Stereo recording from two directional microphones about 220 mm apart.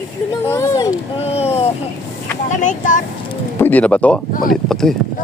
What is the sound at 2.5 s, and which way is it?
Speech, 35° left (ahead or behind).